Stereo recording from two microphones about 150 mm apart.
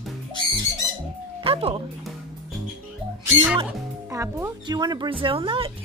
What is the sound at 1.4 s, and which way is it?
Speech, 40° right (ahead or behind).